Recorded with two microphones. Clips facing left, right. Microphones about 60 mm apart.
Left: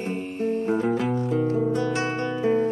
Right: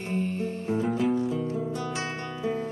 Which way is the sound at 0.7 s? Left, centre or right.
Left.